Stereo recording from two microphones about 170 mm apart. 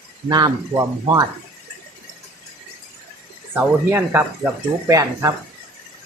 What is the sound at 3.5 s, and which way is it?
Speech, 10° right (ahead or behind).